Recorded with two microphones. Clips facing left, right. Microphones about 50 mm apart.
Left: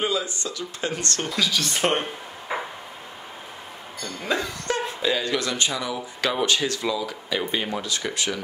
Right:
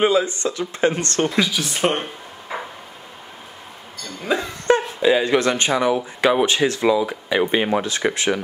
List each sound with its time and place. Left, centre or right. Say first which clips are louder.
0.0 s speech: right 8 dB; right
1.7 s a woman's voice: right 2 dB; centre
2.5 s a sound: even; centre
4.3 s speech: right 4 dB; centre
4.7 s a sound: right 10 dB; right
5.0 s speech: right 8 dB; right
6.2 s speech: right 6 dB; right